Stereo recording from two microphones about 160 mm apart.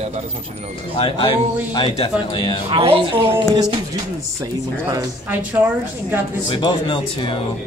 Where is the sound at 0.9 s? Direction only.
30° left (ahead or behind).